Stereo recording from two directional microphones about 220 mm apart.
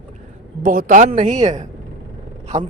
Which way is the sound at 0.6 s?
40° right (ahead or behind).